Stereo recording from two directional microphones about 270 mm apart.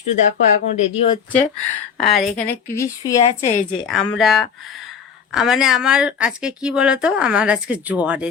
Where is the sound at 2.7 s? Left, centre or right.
Centre.